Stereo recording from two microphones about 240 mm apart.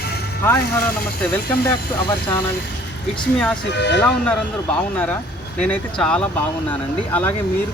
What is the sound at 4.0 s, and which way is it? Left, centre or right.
Speech, centre.